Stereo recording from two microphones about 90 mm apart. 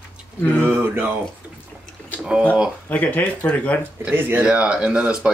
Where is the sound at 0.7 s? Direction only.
25° right (ahead or behind).